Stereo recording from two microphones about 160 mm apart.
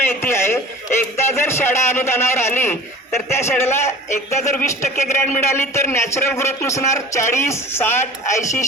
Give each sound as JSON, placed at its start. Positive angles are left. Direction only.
{"t": 0.0, "sound": "a man's voice", "side_deg": 15}